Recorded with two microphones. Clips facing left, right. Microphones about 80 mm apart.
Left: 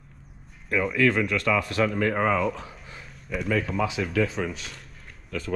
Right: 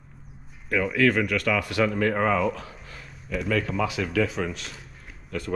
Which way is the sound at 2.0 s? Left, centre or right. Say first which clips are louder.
Right 1 dB; right.